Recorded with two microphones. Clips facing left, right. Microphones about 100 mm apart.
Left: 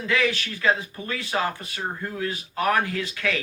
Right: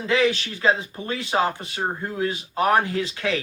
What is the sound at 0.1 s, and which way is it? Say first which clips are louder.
Speech: right 4 dB; 25° right (ahead or behind).